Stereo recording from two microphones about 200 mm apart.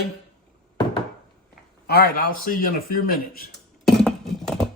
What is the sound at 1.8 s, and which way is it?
Speech, 50° left (ahead or behind).